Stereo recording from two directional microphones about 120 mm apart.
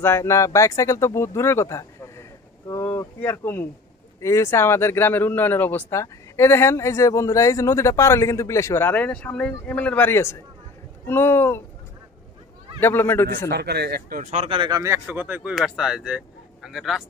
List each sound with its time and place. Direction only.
0.0 s speech: 20° left (ahead or behind)
12.8 s a man's voice: 20° left (ahead or behind)
14.2 s speech: 70° right (ahead or behind)
14.5 s speech: 45° right (ahead or behind)
15.0 s speech: 15° right (ahead or behind)
15.5 s speech: centre (ahead or behind)